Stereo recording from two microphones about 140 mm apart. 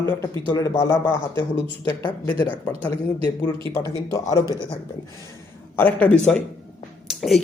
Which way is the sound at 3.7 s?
25° left (ahead or behind).